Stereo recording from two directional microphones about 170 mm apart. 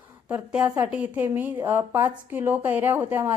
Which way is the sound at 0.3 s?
10° right (ahead or behind).